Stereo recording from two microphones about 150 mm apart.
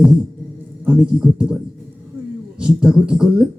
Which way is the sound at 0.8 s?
10° right (ahead or behind).